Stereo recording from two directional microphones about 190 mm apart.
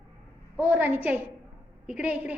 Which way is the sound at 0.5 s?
10° right (ahead or behind).